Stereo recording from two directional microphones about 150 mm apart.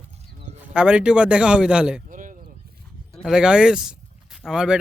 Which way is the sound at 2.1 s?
60° right (ahead or behind).